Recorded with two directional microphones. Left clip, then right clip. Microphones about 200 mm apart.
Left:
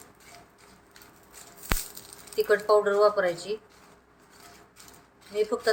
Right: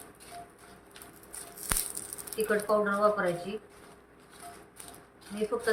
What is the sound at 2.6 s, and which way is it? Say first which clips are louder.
Speech: left 5 dB; 55° left (ahead or behind).